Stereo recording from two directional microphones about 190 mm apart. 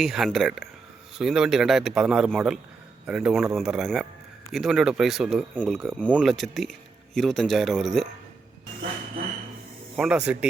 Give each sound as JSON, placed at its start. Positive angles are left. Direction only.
{"t": 0.0, "sound": "a man's voice", "side_deg": 0}
{"t": 9.9, "sound": "a man's voice", "side_deg": -5}